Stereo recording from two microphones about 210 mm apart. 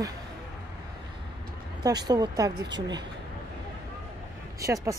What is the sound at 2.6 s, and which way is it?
Speech, 55° right (ahead or behind).